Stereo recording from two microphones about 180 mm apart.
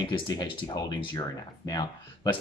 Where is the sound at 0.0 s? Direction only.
25° left (ahead or behind).